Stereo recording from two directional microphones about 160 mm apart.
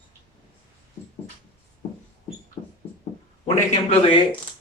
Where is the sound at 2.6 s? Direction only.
25° left (ahead or behind).